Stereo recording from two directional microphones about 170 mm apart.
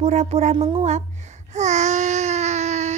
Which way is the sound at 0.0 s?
40° right (ahead or behind).